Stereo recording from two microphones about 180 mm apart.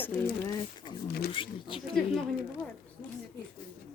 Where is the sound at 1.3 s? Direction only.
30° left (ahead or behind).